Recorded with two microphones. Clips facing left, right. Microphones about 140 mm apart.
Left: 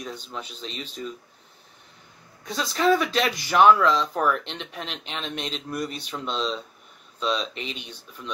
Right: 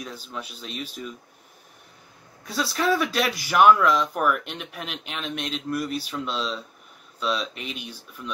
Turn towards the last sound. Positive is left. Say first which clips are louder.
# even
turn(degrees=-5)  # may be behind; listen again after turning